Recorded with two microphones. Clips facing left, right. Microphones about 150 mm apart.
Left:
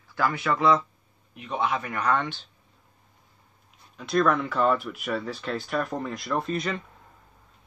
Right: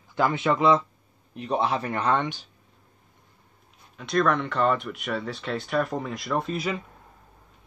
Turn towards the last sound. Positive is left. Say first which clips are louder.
# right 1 dB
turn(degrees=-5)  # may be behind; listen again after turning